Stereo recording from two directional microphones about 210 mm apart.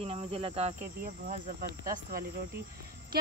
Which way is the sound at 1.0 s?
40° right (ahead or behind).